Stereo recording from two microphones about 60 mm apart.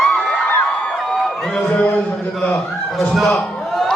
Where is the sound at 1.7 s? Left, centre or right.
Left.